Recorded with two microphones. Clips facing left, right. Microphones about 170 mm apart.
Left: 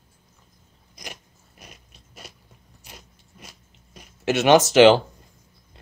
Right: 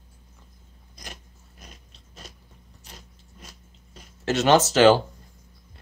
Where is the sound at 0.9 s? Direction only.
10° left (ahead or behind).